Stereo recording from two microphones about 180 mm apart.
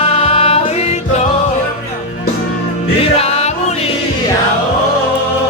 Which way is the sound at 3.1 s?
35° left (ahead or behind).